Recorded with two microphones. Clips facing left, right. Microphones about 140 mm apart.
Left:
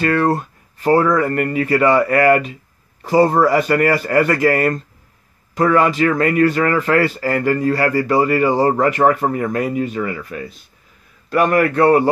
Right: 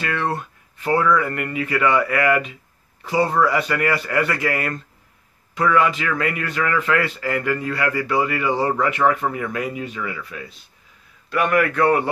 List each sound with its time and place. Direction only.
0.0 s a man's voice: 40° left (ahead or behind)